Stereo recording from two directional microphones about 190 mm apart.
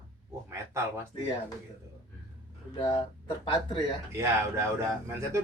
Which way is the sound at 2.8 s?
25° left (ahead or behind).